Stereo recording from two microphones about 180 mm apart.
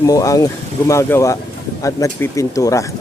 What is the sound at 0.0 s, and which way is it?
Speech, 20° left (ahead or behind).